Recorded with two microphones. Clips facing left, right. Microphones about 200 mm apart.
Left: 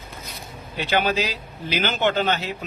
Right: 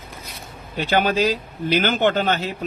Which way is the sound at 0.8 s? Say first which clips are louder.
Right 3 dB; 45° right (ahead or behind).